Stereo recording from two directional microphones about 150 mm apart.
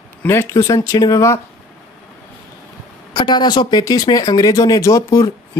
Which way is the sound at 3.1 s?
30° left (ahead or behind).